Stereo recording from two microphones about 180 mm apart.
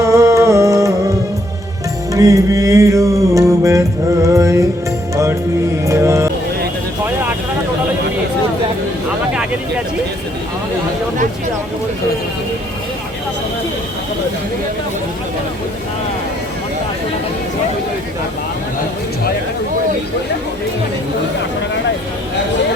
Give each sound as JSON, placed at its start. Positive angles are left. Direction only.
{"t": 0.0, "sound": "music", "side_deg": -15}
{"t": 2.1, "sound": "music", "side_deg": -20}